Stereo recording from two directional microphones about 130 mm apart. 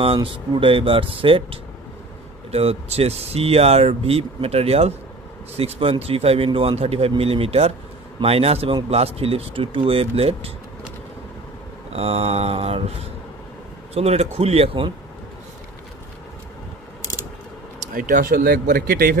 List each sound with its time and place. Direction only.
0.0 s speech: 45° right (ahead or behind)
11.9 s speech: 50° right (ahead or behind)
13.9 s speech: 50° right (ahead or behind)
17.7 s speech: 80° right